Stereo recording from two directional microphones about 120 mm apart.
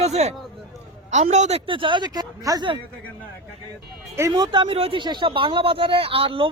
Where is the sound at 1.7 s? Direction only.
45° right (ahead or behind).